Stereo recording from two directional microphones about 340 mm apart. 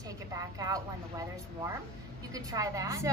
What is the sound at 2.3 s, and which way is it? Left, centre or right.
Speech, centre.